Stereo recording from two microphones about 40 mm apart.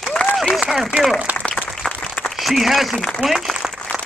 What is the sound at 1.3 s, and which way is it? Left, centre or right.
Applause, right.